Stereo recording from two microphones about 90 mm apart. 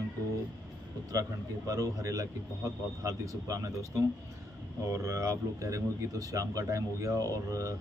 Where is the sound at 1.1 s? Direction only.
40° right (ahead or behind).